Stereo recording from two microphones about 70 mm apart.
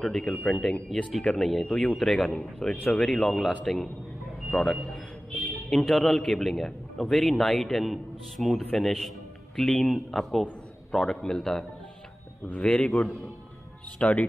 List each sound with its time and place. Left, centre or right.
0.0 s a man's voice: centre